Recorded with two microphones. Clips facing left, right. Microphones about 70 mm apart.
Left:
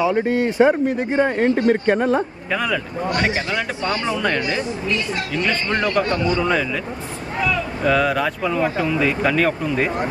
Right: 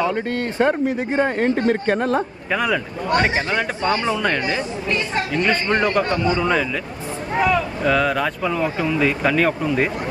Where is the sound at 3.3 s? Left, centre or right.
Right.